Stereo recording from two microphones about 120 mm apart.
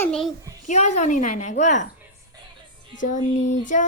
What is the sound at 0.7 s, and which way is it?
A woman's voice, 75° left (ahead or behind).